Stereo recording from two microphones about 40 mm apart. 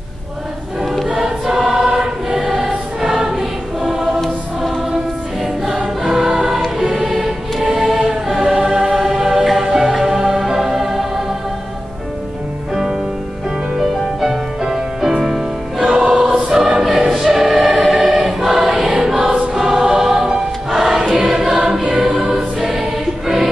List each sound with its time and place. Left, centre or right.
1.2 s choir: centre
6.0 s choir: centre
6.9 s music: centre
7.7 s choir: centre
8.4 s choir: centre
9.0 s music: centre
13.7 s music: centre
16.0 s choir: right
16.8 s choir: centre